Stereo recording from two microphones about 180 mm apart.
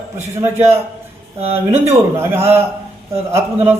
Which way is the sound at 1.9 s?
15° right (ahead or behind).